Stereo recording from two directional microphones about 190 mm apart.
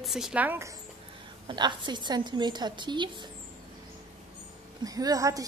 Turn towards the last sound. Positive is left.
turn(degrees=-20)  # may be behind; listen again after turning